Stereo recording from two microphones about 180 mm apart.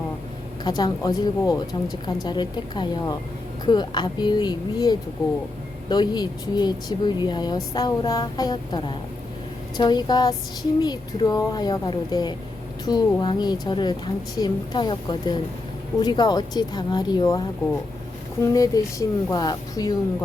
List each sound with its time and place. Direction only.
0.6 s speech: 25° left (ahead or behind)
18.4 s speech: 20° left (ahead or behind)